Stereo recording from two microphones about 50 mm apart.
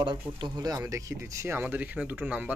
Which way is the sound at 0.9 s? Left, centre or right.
Right.